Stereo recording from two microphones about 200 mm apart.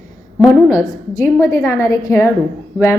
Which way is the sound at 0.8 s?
15° left (ahead or behind).